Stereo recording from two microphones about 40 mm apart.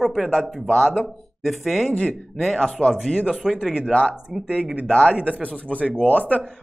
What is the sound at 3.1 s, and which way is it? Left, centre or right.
Speech, centre.